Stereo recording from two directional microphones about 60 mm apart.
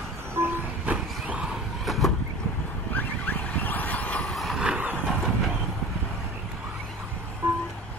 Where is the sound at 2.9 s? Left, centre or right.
Left.